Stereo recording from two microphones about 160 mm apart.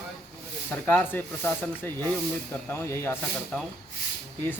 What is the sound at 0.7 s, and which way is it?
Speech, 10° left (ahead or behind).